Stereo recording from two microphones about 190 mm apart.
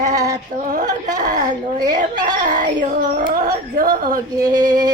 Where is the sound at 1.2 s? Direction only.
40° right (ahead or behind).